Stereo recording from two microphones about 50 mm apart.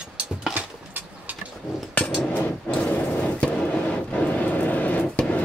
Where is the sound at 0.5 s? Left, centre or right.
Right.